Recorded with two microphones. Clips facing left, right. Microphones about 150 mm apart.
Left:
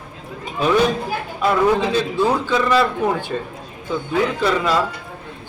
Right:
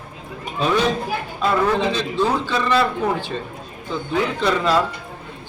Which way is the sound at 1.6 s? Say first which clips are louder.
Left 3 dB; 10° left (ahead or behind).